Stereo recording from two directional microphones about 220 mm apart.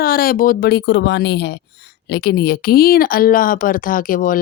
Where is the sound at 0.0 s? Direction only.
40° left (ahead or behind).